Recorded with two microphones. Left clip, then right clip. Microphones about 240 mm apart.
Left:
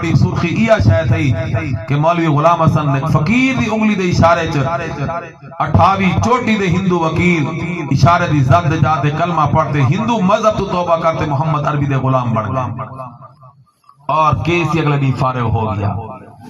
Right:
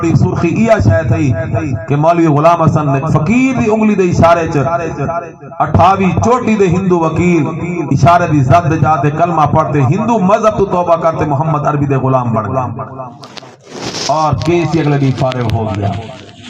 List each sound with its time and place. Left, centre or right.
0.0 s a man's voice: left
14.2 s a man's voice: left